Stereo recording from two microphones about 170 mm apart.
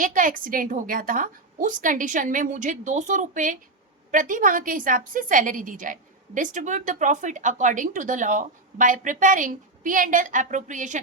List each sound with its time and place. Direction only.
0.0 s a woman's voice: 50° right (ahead or behind)